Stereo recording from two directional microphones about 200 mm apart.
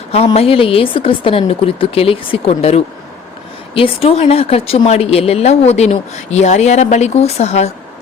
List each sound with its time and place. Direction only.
0.1 s a woman's voice: 30° left (ahead or behind)